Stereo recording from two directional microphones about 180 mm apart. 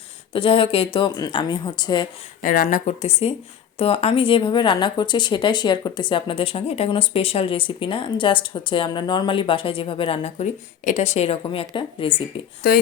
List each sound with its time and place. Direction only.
0.3 s speech: 30° left (ahead or behind)
2.4 s speech: 50° left (ahead or behind); by 12.2 s 30° left (ahead or behind)
12.6 s speech: 55° left (ahead or behind)